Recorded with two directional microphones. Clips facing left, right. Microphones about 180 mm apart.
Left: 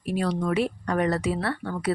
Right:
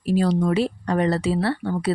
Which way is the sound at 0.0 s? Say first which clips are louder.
Right 6 dB; 30° right (ahead or behind).